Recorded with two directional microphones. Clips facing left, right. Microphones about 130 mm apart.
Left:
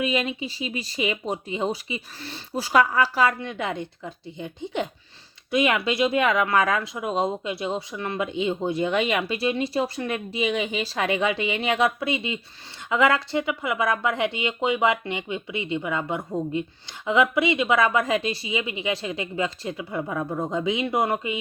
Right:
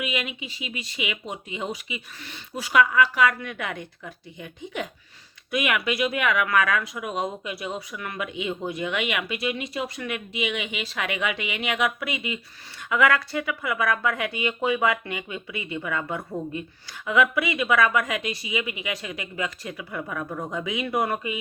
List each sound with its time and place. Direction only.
0.0 s speech: 35° left (ahead or behind)